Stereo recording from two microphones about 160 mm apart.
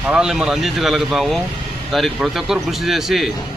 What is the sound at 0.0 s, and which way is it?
Speech, 5° right (ahead or behind).